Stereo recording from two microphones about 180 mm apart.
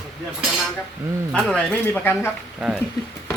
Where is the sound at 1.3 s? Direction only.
5° left (ahead or behind).